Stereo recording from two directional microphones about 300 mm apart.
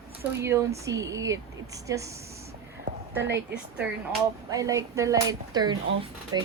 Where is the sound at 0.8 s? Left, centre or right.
Centre.